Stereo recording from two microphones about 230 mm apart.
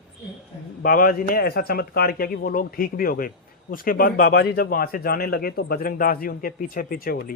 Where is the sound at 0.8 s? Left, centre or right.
Left.